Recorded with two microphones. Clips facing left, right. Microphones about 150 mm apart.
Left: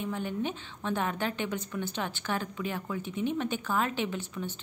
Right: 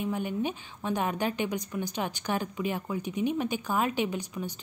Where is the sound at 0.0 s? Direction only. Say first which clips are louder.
Right 2 dB; 15° right (ahead or behind).